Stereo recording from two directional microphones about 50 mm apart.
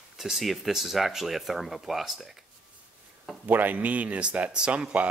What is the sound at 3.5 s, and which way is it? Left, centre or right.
Speech, right.